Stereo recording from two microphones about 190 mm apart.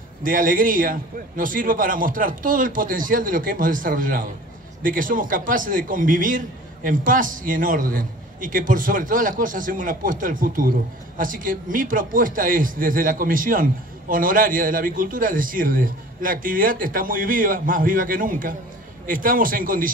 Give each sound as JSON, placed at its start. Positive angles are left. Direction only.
{"t": 0.2, "sound": "a man's voice", "side_deg": -45}